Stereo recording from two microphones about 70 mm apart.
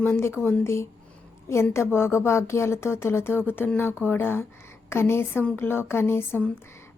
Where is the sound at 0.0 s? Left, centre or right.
Left.